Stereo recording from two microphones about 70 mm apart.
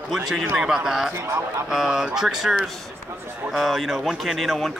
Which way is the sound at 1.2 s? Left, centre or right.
Right.